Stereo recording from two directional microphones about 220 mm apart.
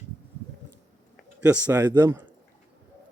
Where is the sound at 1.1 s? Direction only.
5° right (ahead or behind).